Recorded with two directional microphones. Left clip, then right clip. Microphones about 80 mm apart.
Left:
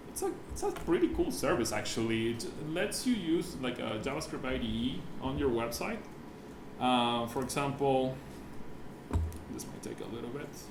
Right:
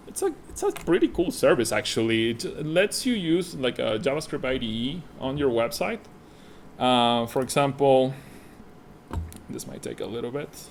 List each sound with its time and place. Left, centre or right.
0.2 s speech: right
9.6 s speech: right